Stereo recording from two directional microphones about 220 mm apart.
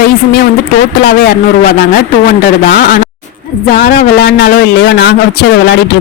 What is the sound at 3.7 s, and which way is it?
A man's voice, 40° left (ahead or behind).